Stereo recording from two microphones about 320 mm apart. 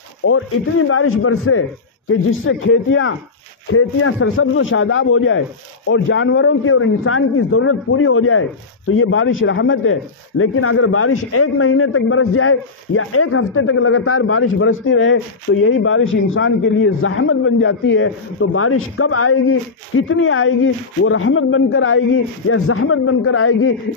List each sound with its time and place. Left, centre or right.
0.3 s a man's voice: left